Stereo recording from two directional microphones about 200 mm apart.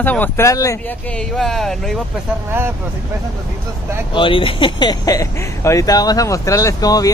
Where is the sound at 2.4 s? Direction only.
10° right (ahead or behind).